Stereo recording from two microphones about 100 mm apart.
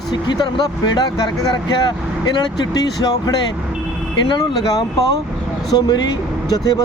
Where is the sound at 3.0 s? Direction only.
40° left (ahead or behind).